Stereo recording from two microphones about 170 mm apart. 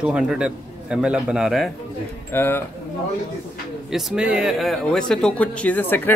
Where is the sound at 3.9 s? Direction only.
5° right (ahead or behind).